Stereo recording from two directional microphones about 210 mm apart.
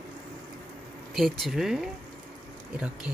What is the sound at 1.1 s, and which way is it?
Speech, centre (ahead or behind).